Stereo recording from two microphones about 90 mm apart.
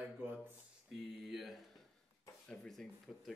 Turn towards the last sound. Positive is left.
turn(degrees=5)  # may be behind; listen again after turning